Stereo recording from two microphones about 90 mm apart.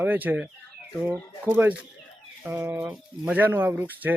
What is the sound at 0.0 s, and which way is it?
Speech, 20° right (ahead or behind).